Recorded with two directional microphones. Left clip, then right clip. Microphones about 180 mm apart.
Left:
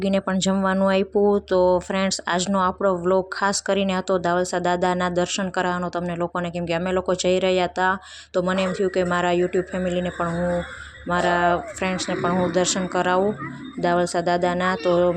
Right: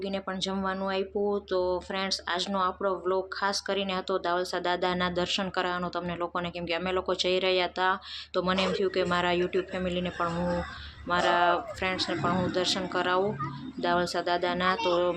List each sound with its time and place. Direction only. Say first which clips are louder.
0.0 s speech: left 9 dB; 50° left (ahead or behind)